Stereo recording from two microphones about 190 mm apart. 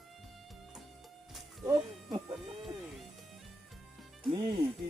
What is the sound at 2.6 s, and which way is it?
Music, centre (ahead or behind).